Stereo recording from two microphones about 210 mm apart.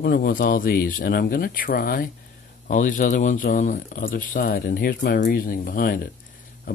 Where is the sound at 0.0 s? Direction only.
45° left (ahead or behind).